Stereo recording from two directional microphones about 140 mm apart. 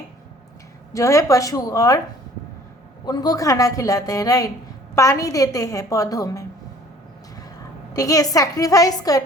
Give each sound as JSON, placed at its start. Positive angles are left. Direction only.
{"t": 0.9, "sound": "a woman's voice", "side_deg": 20}
{"t": 3.1, "sound": "a woman's voice", "side_deg": 25}
{"t": 7.9, "sound": "a woman's voice", "side_deg": 25}